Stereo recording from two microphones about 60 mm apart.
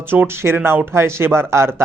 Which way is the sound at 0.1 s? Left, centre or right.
Right.